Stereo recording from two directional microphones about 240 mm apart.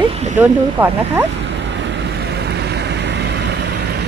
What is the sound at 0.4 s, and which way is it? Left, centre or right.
Speech, centre.